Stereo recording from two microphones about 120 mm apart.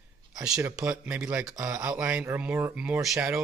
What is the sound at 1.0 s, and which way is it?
Speech, 10° right (ahead or behind).